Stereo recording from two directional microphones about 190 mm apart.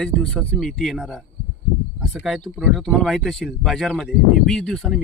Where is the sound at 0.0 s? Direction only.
5° left (ahead or behind).